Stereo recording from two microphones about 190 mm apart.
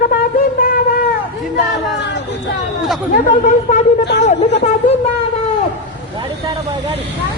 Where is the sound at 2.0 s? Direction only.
65° left (ahead or behind).